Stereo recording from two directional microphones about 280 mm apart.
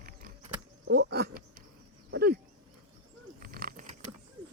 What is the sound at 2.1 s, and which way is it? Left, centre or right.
Dog, right.